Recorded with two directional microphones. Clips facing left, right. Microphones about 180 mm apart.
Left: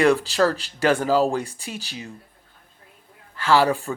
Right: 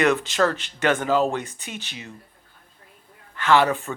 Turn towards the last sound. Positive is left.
turn(degrees=35)  # may be behind; listen again after turning